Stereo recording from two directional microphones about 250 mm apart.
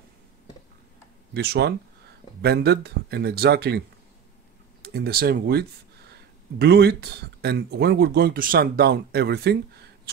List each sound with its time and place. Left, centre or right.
1.3 s speech: right
4.8 s speech: right